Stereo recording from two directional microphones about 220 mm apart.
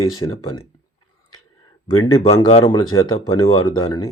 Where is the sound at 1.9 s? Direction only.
15° left (ahead or behind).